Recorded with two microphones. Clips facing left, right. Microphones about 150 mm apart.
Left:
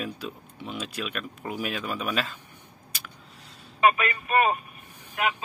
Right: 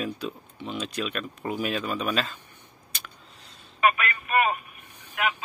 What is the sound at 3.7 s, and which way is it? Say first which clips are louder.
Speech: left 2 dB; 30° left (ahead or behind).